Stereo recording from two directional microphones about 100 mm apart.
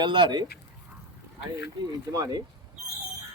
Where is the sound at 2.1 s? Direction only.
35° right (ahead or behind).